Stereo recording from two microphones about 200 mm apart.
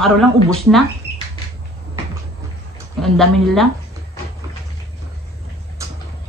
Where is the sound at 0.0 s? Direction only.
Centre (ahead or behind).